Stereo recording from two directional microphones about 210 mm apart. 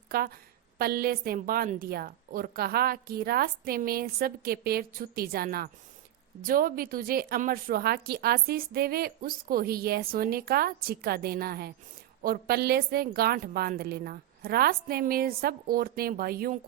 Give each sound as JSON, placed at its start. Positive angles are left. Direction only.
{"t": 0.1, "sound": "a woman's voice", "side_deg": -45}